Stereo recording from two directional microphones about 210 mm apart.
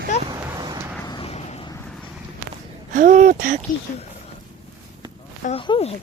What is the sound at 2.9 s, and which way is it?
Speech, 40° right (ahead or behind).